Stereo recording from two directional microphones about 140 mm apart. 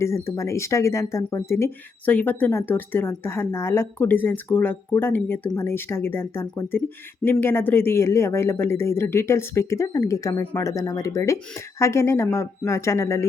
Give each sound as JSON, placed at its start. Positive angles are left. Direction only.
{"t": 0.0, "sound": "speech", "side_deg": 20}